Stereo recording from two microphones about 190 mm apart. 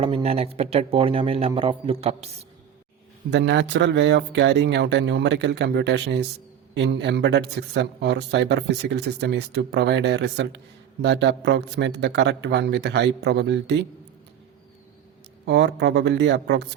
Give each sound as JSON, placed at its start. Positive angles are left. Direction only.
{"t": 0.0, "sound": "speech", "side_deg": -30}
{"t": 3.2, "sound": "speech", "side_deg": -70}
{"t": 15.4, "sound": "speech", "side_deg": -65}